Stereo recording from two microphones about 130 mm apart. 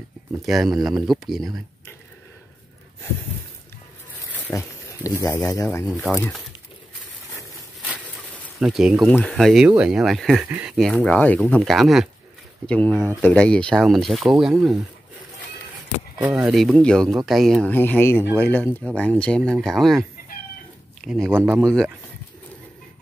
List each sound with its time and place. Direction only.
0.5 s speech: centre (ahead or behind)
4.6 s speech: 25° left (ahead or behind)
8.5 s speech: 5° right (ahead or behind)
9.1 s speech: 5° left (ahead or behind)
10.4 s speech: 10° right (ahead or behind)
10.8 s speech: 5° left (ahead or behind)
12.6 s speech: 10° left (ahead or behind)
16.2 s speech: 5° right (ahead or behind)
17.6 s speech: 15° left (ahead or behind)
21.0 s speech: centre (ahead or behind)
21.3 s speech: 15° right (ahead or behind)